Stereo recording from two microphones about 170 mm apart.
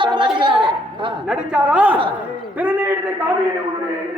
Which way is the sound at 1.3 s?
5° right (ahead or behind).